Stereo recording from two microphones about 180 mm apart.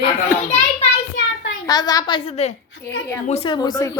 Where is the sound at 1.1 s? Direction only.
90° left.